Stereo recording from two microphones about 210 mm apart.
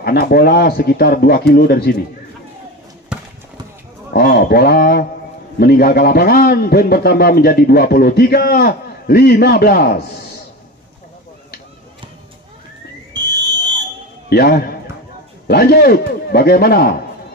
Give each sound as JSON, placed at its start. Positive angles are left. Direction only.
{"t": 0.0, "sound": "a man's voice", "side_deg": 45}
{"t": 4.1, "sound": "a man's voice", "side_deg": 45}
{"t": 13.1, "sound": "fire alarm", "side_deg": -20}
{"t": 14.3, "sound": "a man's voice", "side_deg": 45}